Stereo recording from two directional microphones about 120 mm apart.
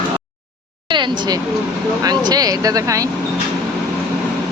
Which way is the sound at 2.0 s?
35° right (ahead or behind).